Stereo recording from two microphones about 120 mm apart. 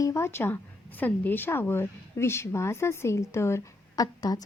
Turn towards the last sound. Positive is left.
turn(degrees=30)  # may be behind; listen again after turning